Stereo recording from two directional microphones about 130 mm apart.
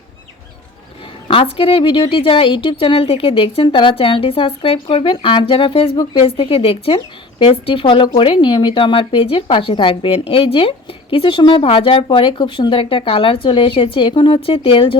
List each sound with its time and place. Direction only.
1.3 s speech: 45° left (ahead or behind)